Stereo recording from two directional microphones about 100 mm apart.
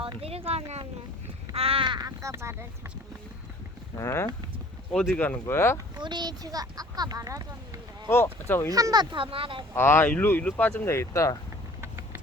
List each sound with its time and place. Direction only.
0.0 s a sound: 70° right (ahead or behind); by 0.8 s 90° right
1.5 s crow: 70° right (ahead or behind); by 2.0 s 55° right (ahead or behind)
2.0 s speech: 30° right (ahead or behind)
3.9 s speech: 30° left (ahead or behind)
5.1 s speech: 20° left (ahead or behind)
6.0 s speech: 45° right (ahead or behind)
8.0 s speech: 25° left (ahead or behind)
8.7 s speech: 40° right (ahead or behind)
9.1 s speech: 65° right (ahead or behind)
9.7 s speech: 25° left (ahead or behind)
11.8 s vehicle: 25° right (ahead or behind)